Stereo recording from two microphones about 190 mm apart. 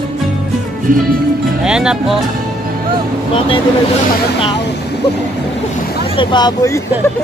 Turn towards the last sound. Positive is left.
turn(degrees=20)  # may be behind; listen again after turning